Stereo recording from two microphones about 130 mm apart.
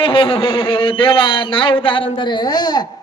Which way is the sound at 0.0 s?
45° left (ahead or behind).